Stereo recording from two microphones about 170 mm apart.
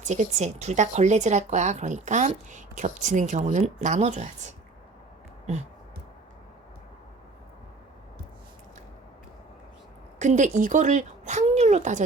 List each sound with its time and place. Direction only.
0.0 s speech: 45° right (ahead or behind)
10.2 s speech: 45° right (ahead or behind)